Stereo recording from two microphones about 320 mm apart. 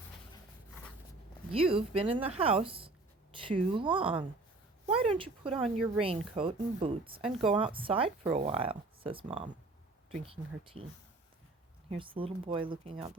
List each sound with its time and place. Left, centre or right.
1.5 s speech: centre
11.9 s speech: centre